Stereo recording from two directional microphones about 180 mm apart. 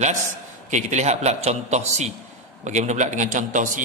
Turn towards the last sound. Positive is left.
turn(degrees=-45)  # may be behind; listen again after turning